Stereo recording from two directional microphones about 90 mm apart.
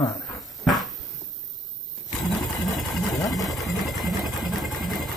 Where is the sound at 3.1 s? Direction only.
40° left (ahead or behind).